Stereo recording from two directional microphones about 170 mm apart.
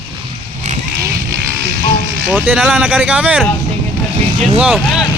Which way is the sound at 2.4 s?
10° right (ahead or behind).